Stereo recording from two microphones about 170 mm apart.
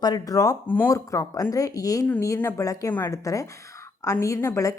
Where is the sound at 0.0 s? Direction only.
20° left (ahead or behind).